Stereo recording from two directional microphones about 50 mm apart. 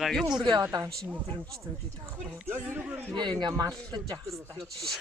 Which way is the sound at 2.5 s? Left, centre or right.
Right.